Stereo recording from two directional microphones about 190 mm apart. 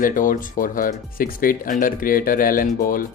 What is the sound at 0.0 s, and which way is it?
Speech, 45° left (ahead or behind).